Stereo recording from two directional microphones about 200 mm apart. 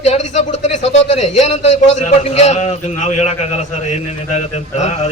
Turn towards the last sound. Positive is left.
turn(degrees=35)  # may be behind; listen again after turning